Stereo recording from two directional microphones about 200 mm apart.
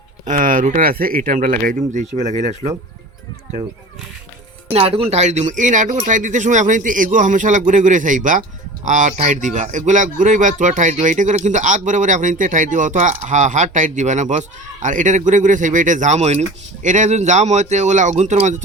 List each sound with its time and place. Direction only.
0.3 s speech: 40° right (ahead or behind)
4.7 s speech: 30° right (ahead or behind)